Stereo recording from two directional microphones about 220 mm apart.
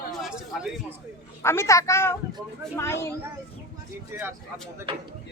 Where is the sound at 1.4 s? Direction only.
15° left (ahead or behind).